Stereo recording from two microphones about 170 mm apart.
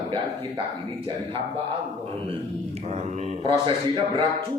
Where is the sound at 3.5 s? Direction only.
30° right (ahead or behind).